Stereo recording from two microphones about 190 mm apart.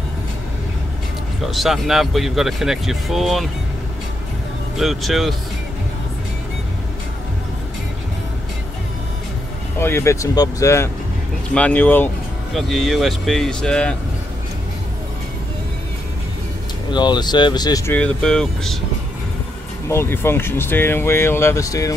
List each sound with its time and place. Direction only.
1.5 s speech: centre (ahead or behind)
4.7 s speech: centre (ahead or behind)
9.8 s speech: 15° left (ahead or behind)
16.9 s speech: 25° left (ahead or behind)
17.9 s speech: 5° left (ahead or behind)
19.9 s speech: 10° left (ahead or behind)